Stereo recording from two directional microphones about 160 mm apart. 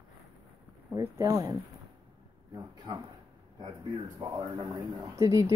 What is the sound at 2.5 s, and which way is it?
Speech, 25° right (ahead or behind).